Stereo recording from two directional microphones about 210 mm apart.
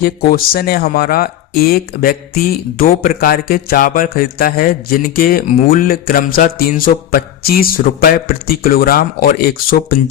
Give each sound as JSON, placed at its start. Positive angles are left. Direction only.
{"t": 0.0, "sound": "speech", "side_deg": 45}